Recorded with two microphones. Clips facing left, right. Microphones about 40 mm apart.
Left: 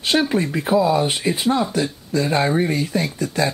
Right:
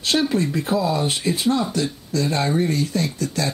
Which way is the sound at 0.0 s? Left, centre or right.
Centre.